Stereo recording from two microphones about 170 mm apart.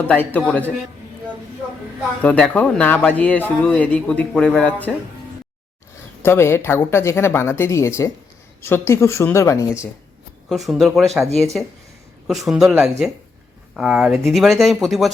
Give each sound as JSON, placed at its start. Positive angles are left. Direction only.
{"t": 0.1, "sound": "speech", "side_deg": 10}
{"t": 2.2, "sound": "speech", "side_deg": 5}
{"t": 6.2, "sound": "speech", "side_deg": 15}
{"t": 10.5, "sound": "speech", "side_deg": 0}
{"t": 12.5, "sound": "speech", "side_deg": -5}